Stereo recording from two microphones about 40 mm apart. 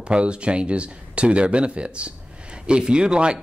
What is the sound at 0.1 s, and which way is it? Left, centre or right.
Speech, right.